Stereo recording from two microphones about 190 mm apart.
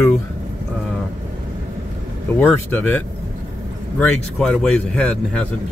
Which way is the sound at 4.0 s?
5° left (ahead or behind).